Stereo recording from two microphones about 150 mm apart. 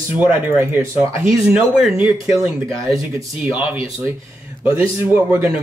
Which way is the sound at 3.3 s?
5° right (ahead or behind).